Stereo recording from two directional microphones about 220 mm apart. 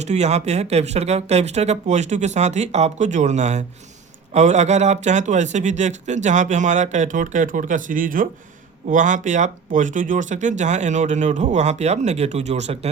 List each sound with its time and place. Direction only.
0.0 s speech: 30° right (ahead or behind)